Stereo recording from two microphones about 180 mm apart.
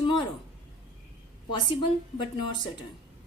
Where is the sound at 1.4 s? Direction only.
25° left (ahead or behind).